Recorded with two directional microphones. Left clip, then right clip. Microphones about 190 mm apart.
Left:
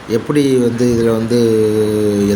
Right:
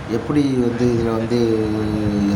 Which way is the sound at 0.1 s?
10° left (ahead or behind).